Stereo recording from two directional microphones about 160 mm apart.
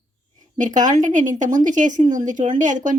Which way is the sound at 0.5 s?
50° right (ahead or behind).